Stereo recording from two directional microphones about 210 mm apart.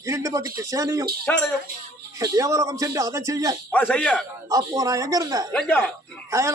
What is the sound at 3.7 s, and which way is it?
Speech, 5° left (ahead or behind).